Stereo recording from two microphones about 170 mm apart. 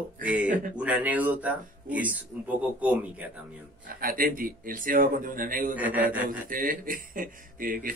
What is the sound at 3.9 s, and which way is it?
A man's voice, 55° right (ahead or behind).